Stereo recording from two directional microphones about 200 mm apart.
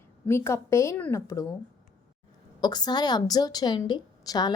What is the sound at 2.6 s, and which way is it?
A woman's voice, 20° left (ahead or behind).